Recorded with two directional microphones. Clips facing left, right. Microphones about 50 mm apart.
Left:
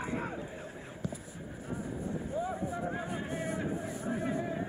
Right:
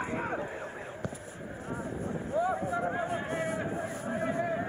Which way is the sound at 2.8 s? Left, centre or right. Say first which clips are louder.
Right 4 dB; right.